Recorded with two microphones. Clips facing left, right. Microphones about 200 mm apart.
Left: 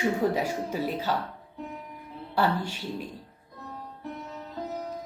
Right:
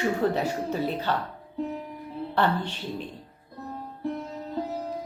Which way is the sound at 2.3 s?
10° left (ahead or behind).